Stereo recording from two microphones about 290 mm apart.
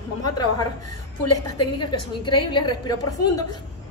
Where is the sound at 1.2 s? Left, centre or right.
Left.